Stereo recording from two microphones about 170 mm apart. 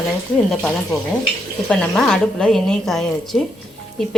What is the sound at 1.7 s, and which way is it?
A woman's voice, 5° left (ahead or behind).